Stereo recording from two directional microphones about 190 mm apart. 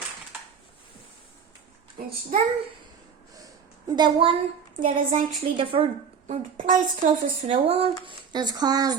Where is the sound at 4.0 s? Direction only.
25° right (ahead or behind).